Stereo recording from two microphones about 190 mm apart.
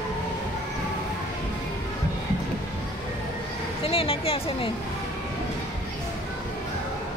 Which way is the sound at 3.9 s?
30° left (ahead or behind).